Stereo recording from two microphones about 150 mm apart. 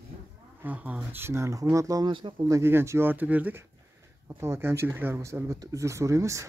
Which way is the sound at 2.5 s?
15° right (ahead or behind).